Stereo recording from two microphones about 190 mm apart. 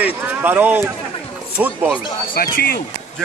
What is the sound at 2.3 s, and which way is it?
Speech, 55° left (ahead or behind).